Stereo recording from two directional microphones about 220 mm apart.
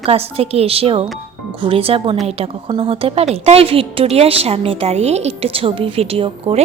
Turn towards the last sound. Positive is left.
turn(degrees=-25)  # may be behind; listen again after turning